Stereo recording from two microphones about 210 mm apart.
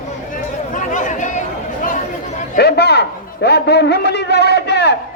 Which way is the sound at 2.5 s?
50° left (ahead or behind).